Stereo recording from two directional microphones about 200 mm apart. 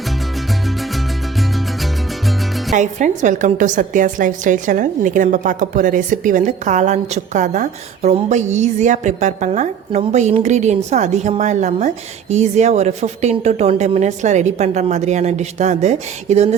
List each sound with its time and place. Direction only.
0.8 s music: centre (ahead or behind)
2.7 s a woman's voice: 40° right (ahead or behind)